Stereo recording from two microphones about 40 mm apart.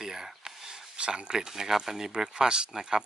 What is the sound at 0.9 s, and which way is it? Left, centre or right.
Speech, right.